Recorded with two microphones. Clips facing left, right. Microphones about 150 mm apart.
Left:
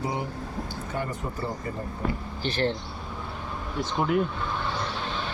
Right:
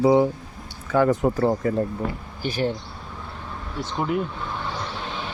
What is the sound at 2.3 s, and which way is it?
Speech, 10° right (ahead or behind).